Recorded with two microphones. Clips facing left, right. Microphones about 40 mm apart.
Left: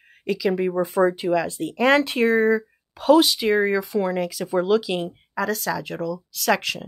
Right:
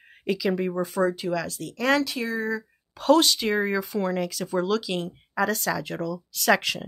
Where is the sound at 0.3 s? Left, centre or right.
Centre.